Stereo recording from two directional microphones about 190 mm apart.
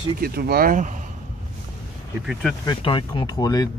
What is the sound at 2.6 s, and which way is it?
Speech, 25° left (ahead or behind).